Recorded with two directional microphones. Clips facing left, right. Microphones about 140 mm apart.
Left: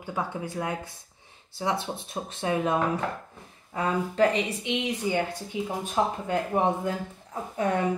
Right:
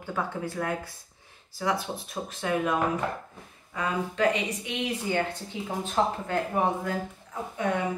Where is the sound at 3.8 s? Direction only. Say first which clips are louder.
Left 4 dB; 35° left (ahead or behind).